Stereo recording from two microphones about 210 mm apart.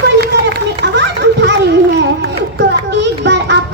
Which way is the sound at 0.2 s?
55° right (ahead or behind).